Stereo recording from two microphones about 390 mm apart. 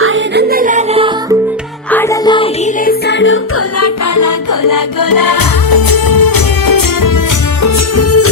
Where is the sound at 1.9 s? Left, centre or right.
Centre; by 7.2 s left.